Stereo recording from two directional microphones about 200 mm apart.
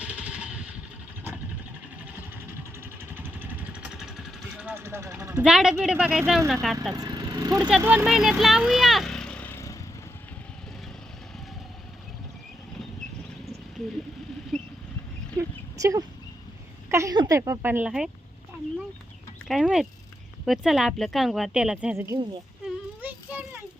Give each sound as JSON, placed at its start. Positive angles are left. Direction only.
{"t": 0.0, "sound": "vehicle", "side_deg": -5}
{"t": 3.2, "sound": "vehicle", "side_deg": -10}
{"t": 6.5, "sound": "speech", "side_deg": 0}
{"t": 6.9, "sound": "speech", "side_deg": -20}
{"t": 7.8, "sound": "speech", "side_deg": -10}
{"t": 14.5, "sound": "rodents", "side_deg": 0}
{"t": 15.4, "sound": "a sound", "side_deg": -15}
{"t": 16.9, "sound": "speech", "side_deg": -15}
{"t": 19.5, "sound": "speech", "side_deg": 0}
{"t": 22.6, "sound": "child singing", "side_deg": -10}